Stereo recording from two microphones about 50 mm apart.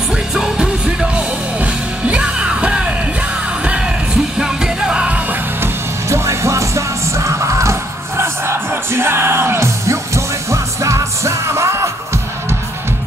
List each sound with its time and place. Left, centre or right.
0.1 s music: centre
5.6 s music: right